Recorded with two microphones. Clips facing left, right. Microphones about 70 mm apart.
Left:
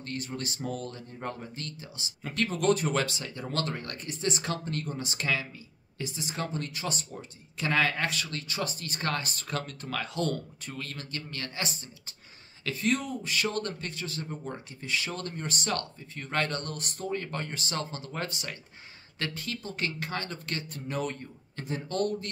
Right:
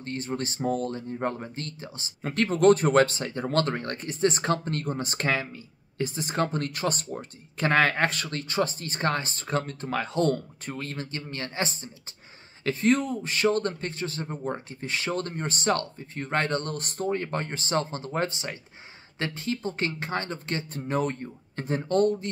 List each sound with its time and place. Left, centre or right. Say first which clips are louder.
0.0 s speech: right 5 dB; right